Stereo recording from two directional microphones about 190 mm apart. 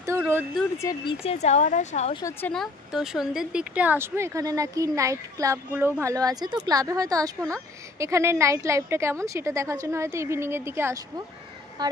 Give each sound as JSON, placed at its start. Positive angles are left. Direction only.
{"t": 0.0, "sound": "a sound", "side_deg": -15}
{"t": 0.7, "sound": "speech", "side_deg": 20}
{"t": 1.2, "sound": "speech", "side_deg": 35}
{"t": 2.2, "sound": "a woman's voice", "side_deg": 5}